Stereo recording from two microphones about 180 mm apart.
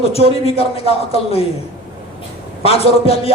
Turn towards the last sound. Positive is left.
turn(degrees=35)  # may be behind; listen again after turning